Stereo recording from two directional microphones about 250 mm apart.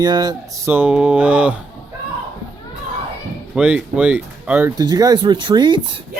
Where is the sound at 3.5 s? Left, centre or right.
Centre.